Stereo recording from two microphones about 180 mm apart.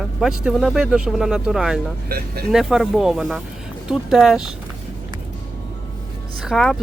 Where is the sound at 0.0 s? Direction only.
Centre (ahead or behind).